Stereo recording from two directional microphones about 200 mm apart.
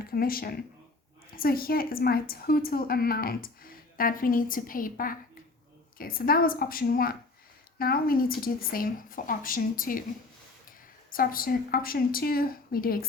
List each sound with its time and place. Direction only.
0.0 s a woman's voice: 50° left (ahead or behind)